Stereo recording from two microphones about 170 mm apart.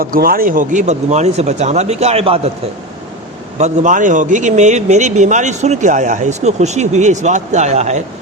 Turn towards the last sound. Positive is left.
turn(degrees=-40)  # may be behind; listen again after turning